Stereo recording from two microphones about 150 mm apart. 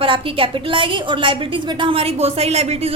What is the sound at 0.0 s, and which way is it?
A woman's voice, 35° right (ahead or behind).